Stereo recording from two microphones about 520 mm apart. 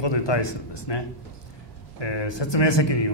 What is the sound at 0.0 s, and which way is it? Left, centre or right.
A man's voice, left.